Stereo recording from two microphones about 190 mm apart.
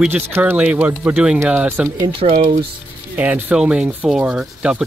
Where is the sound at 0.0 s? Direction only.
10° right (ahead or behind).